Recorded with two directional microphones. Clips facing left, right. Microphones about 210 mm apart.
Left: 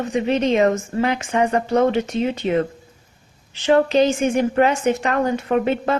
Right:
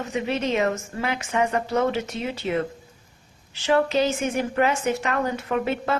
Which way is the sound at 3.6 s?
30° left (ahead or behind).